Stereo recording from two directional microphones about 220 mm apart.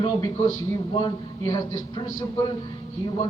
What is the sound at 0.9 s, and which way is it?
A man's voice, 20° left (ahead or behind).